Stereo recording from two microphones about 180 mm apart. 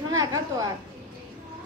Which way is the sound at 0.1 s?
20° right (ahead or behind).